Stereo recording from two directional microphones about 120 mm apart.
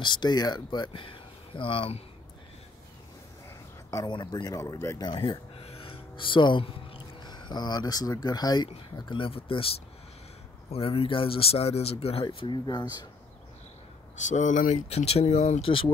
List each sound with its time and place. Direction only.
0.0 s speech: 40° left (ahead or behind)
3.9 s speech: 35° left (ahead or behind)
5.0 s music: 40° left (ahead or behind)
7.2 s speech: 35° left (ahead or behind); by 12.3 s 55° left (ahead or behind)
12.4 s speech: 40° left (ahead or behind)
14.1 s speech: 90° left; by 15.6 s 65° left (ahead or behind)
15.6 s speech: 50° left (ahead or behind)